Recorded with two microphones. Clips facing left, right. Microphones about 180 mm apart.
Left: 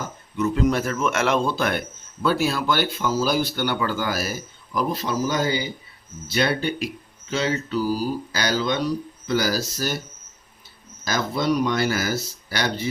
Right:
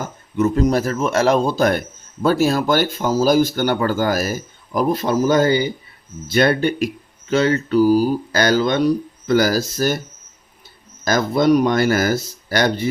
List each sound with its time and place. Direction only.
0.3 s speech: 45° right (ahead or behind)
11.0 s speech: 50° right (ahead or behind)